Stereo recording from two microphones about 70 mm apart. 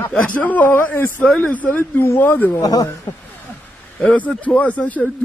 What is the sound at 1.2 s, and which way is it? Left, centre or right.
Speech, centre.